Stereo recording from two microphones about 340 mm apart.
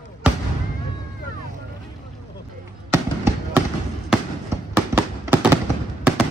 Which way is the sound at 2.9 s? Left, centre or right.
Centre.